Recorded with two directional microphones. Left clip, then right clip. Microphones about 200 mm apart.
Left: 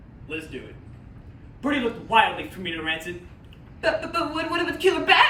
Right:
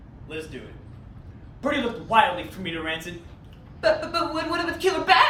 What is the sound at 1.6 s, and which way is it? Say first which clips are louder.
A man's voice: even; 10° right (ahead or behind).